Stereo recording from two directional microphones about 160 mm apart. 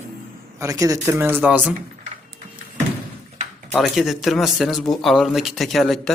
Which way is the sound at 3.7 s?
Centre (ahead or behind).